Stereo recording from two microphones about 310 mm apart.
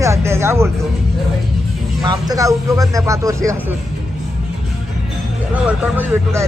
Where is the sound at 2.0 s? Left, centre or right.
Centre.